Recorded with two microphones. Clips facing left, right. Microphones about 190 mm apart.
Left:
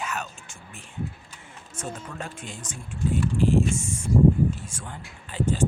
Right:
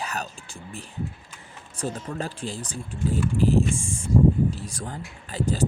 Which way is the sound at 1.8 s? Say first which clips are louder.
Right 5 dB; 35° right (ahead or behind).